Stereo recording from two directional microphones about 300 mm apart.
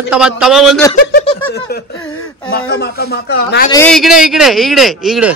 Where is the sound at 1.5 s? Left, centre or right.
Left.